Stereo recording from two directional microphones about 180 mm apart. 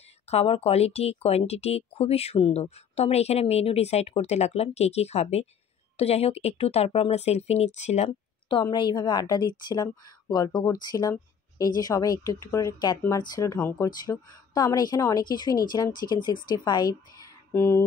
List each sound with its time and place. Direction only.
0.3 s speech: 35° left (ahead or behind); by 17.8 s 15° left (ahead or behind)